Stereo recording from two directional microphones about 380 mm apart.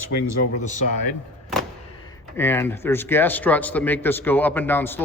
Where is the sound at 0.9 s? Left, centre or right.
Left.